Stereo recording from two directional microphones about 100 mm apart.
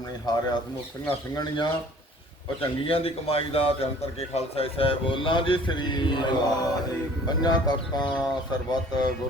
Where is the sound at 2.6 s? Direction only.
65° left (ahead or behind); by 6.3 s 50° left (ahead or behind).